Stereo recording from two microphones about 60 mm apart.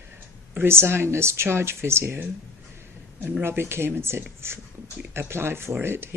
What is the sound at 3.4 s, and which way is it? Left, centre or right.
Speech, right.